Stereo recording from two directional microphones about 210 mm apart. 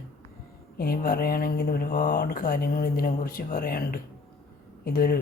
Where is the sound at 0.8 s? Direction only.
45° left (ahead or behind).